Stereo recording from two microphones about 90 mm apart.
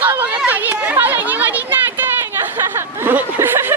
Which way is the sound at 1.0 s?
20° right (ahead or behind).